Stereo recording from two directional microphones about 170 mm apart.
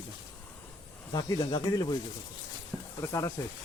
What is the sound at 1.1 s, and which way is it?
Speech, 25° left (ahead or behind).